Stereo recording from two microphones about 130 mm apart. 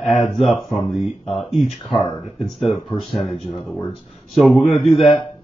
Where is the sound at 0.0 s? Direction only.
Centre (ahead or behind).